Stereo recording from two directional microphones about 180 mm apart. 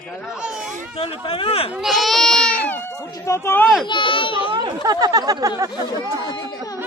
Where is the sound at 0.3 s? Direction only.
5° right (ahead or behind).